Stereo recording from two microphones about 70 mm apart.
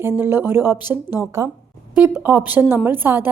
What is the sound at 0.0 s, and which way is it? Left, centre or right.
A woman's voice, right.